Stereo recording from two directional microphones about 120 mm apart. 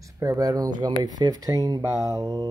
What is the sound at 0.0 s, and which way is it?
Speech, 25° right (ahead or behind).